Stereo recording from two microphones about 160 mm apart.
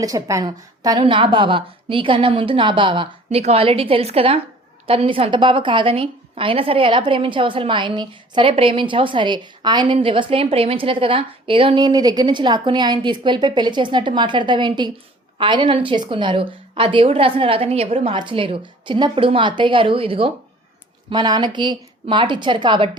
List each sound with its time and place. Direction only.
0.0 s a woman's voice: 20° right (ahead or behind)